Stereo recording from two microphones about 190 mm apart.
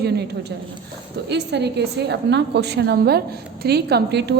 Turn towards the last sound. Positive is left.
turn(degrees=-60)  # may be behind; listen again after turning